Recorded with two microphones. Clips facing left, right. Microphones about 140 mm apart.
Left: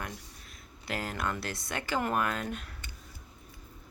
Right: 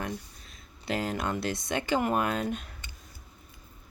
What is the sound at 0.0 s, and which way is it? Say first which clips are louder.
Speech: right 6 dB; 25° right (ahead or behind).